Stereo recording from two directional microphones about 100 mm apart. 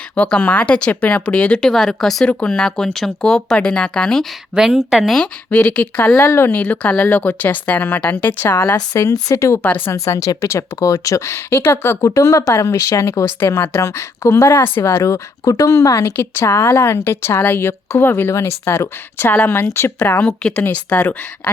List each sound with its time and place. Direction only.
0.2 s speech: 10° left (ahead or behind)
4.5 s speech: 5° right (ahead or behind); by 6.1 s 15° left (ahead or behind)
6.1 s speech: 25° left (ahead or behind)